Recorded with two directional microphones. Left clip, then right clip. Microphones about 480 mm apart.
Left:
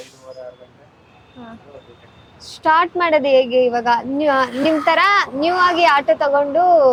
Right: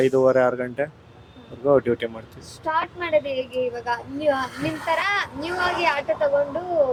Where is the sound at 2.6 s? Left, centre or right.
Left.